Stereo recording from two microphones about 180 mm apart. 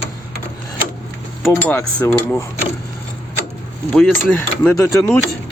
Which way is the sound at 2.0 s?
10° left (ahead or behind).